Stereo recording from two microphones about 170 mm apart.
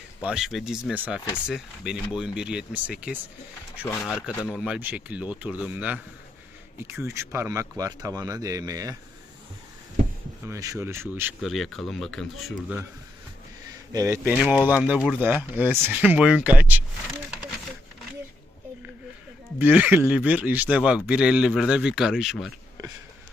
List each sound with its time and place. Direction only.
0.2 s speech: 5° right (ahead or behind)
4.0 s a man's voice: 10° left (ahead or behind)
4.5 s speech: 5° right (ahead or behind); by 9.0 s 20° right (ahead or behind)
10.4 s speech: 20° right (ahead or behind)
11.3 s speech: centre (ahead or behind)
13.9 s speech: 20° right (ahead or behind)
19.5 s speech: 10° right (ahead or behind)